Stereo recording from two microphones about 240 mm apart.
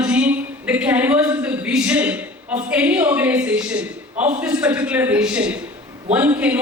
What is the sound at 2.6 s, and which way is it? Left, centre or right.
A man's voice, centre.